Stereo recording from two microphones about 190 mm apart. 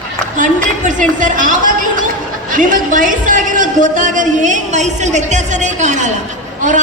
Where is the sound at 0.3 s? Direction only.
45° right (ahead or behind).